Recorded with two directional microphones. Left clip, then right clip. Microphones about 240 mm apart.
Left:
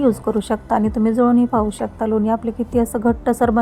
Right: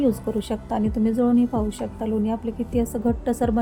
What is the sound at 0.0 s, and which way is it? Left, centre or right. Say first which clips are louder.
A woman's voice: left 5 dB; centre.